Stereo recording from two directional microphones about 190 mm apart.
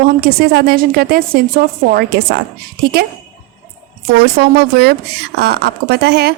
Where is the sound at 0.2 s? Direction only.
55° right (ahead or behind).